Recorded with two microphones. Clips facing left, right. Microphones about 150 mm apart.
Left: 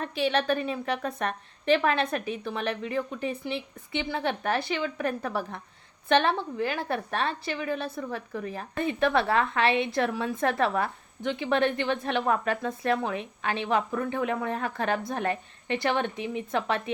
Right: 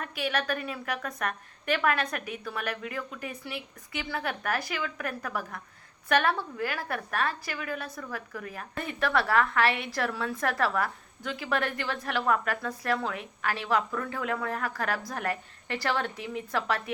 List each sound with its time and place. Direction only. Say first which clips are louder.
0.0 s a woman's voice: left 5 dB; 25° left (ahead or behind)